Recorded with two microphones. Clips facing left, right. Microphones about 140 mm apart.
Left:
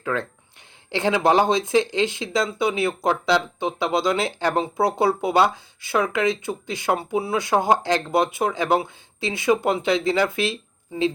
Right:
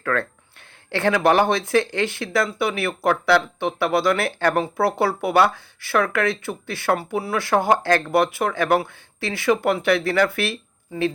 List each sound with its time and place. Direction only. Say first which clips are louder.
0.0 s speech: right 2 dB; 15° left (ahead or behind)